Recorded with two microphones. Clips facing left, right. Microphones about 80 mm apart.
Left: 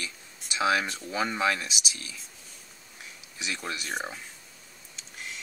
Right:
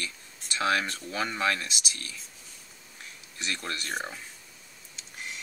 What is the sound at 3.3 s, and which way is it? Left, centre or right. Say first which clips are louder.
Speech: even; centre.